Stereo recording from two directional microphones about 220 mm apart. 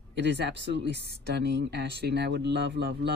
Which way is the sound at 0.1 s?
50° right (ahead or behind).